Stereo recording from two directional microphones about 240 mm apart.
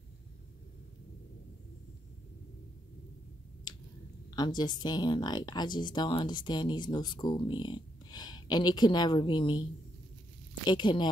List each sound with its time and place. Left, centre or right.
4.4 s speech: centre